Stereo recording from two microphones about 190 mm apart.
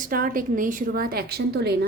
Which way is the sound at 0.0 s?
50° right (ahead or behind).